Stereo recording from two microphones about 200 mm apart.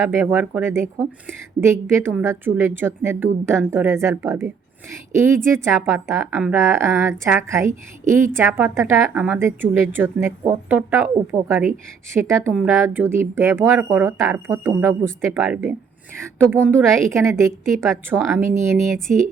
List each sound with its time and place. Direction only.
0.0 s a woman's voice: 10° right (ahead or behind)
16.7 s a woman's voice: 15° right (ahead or behind)
18.9 s speech: centre (ahead or behind)